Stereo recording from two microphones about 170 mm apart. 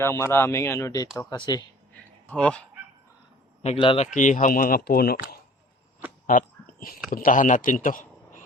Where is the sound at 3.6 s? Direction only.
35° left (ahead or behind); by 5.2 s 65° left (ahead or behind).